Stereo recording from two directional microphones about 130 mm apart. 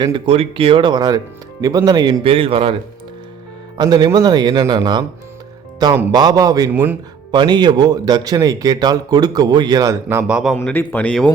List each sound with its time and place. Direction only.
0.0 s speech: 40° right (ahead or behind)
3.8 s speech: 30° right (ahead or behind)
6.1 s speech: 30° right (ahead or behind)
6.7 s speech: 15° right (ahead or behind)
7.3 s speech: 35° right (ahead or behind)
10.2 s a man's voice: 5° right (ahead or behind)
10.6 s speech: 15° left (ahead or behind)